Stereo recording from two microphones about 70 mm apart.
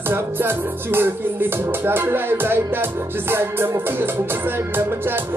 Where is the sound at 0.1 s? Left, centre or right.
Right.